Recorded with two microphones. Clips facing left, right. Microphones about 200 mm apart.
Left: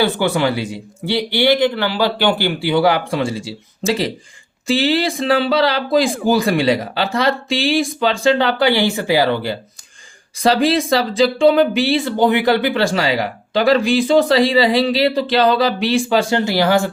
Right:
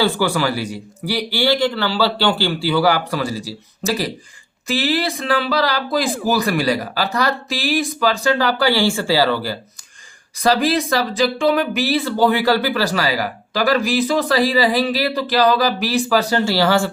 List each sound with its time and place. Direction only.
0.0 s speech: 20° left (ahead or behind)